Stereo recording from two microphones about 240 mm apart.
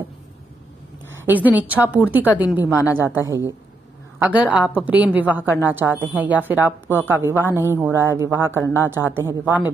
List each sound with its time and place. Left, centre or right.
1.2 s a woman's voice: centre
7.4 s a woman's voice: centre
7.7 s a woman's voice: centre
8.6 s a woman's voice: centre
8.9 s a woman's voice: centre